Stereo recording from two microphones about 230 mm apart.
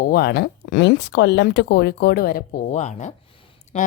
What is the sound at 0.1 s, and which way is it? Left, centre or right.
A woman's voice, left.